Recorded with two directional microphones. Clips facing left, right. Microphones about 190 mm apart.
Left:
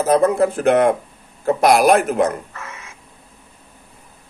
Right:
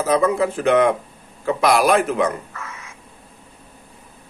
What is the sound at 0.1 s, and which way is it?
Speech, 50° left (ahead or behind).